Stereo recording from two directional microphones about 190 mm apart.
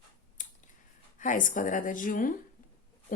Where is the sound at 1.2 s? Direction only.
40° left (ahead or behind).